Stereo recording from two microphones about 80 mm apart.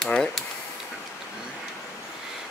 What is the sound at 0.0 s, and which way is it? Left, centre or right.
Mechanisms, centre.